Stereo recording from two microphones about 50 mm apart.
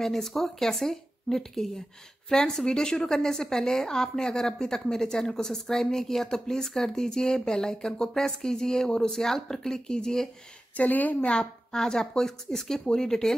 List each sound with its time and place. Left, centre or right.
0.0 s speech: centre
10.8 s a woman's voice: left
11.1 s a woman's voice: left
11.7 s speech: centre